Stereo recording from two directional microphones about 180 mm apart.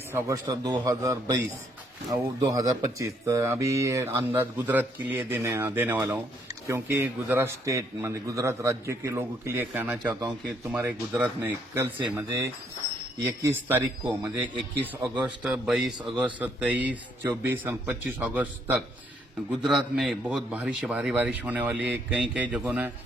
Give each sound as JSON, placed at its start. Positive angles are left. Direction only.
{"t": 0.1, "sound": "a man's voice", "side_deg": -15}
{"t": 10.2, "sound": "a man's voice", "side_deg": -20}
{"t": 10.7, "sound": "speech", "side_deg": -10}